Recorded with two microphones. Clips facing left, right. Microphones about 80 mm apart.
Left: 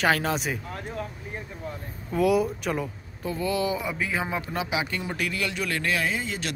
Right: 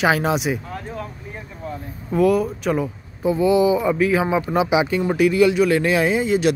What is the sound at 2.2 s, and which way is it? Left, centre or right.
Speech, centre.